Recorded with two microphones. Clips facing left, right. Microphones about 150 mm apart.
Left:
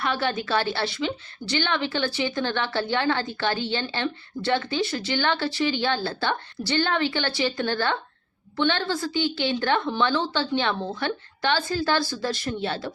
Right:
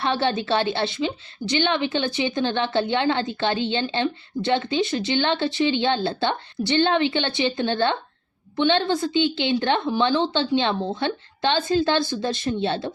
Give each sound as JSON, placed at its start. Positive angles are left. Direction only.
{"t": 0.0, "sound": "a woman's voice", "side_deg": -25}